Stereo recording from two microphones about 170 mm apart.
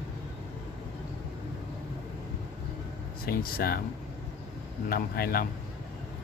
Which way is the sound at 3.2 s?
60° left (ahead or behind).